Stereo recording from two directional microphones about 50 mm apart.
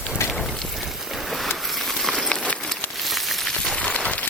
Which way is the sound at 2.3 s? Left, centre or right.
Left.